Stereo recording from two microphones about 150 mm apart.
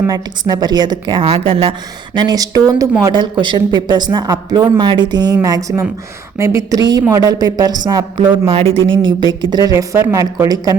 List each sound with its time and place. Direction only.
0.1 s a woman's voice: 25° right (ahead or behind)
2.1 s a woman's voice: 25° right (ahead or behind)
8.5 s a woman's voice: 40° right (ahead or behind); by 10.8 s 20° right (ahead or behind)